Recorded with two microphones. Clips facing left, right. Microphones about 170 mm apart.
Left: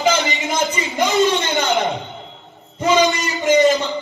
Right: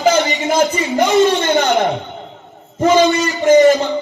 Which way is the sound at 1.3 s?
50° right (ahead or behind).